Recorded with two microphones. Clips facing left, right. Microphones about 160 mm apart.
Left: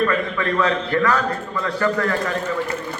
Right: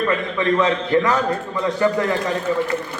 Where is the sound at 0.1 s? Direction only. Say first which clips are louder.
Right 2 dB; 20° right (ahead or behind).